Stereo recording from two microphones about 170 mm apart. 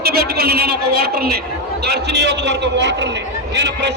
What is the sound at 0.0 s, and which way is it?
A man's voice, 65° right (ahead or behind).